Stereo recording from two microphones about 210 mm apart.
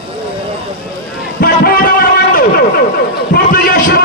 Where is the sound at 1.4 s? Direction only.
45° left (ahead or behind).